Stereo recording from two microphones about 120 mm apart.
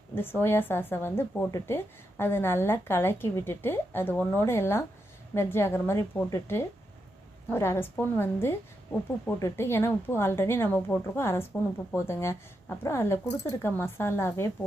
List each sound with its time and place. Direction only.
0.1 s a woman's voice: 20° left (ahead or behind)